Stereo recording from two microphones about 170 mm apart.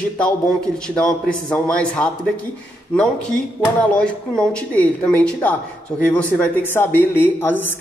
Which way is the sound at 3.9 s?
5° left (ahead or behind).